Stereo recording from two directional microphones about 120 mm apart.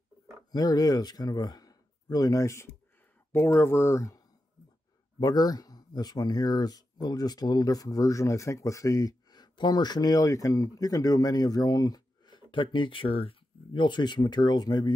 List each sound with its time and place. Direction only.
0.5 s speech: 35° left (ahead or behind)
5.2 s speech: 30° left (ahead or behind)